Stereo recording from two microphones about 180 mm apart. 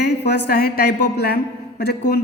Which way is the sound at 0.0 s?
65° left (ahead or behind).